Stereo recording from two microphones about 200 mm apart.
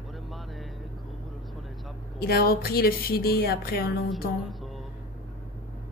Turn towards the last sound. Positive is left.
turn(degrees=0)  # may be behind; listen again after turning